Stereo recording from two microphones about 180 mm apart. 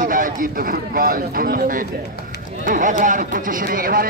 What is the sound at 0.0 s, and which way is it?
A man's voice, 50° right (ahead or behind).